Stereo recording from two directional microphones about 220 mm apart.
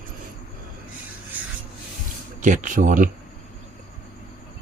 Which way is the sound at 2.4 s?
35° right (ahead or behind).